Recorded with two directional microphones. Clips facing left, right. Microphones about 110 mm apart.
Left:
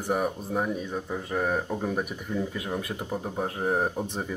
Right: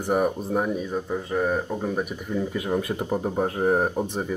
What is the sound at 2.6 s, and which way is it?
Speech, 20° right (ahead or behind).